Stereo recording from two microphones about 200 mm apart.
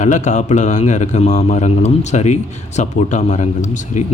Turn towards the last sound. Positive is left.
turn(degrees=35)  # may be behind; listen again after turning